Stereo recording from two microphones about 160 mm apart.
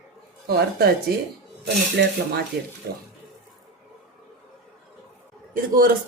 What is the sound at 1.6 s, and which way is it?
Speech, 90° right.